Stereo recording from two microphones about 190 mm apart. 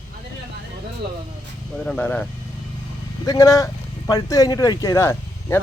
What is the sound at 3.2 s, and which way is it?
Speech, 15° left (ahead or behind).